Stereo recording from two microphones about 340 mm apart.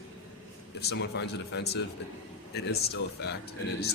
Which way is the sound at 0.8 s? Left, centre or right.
Left.